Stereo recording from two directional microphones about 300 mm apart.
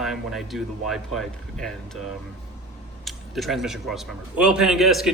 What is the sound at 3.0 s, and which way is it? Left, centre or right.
Speech, centre.